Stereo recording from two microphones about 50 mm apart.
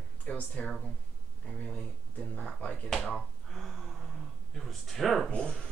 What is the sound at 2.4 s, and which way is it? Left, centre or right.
Speech, centre.